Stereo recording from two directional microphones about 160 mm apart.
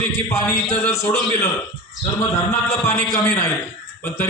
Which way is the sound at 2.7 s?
15° left (ahead or behind).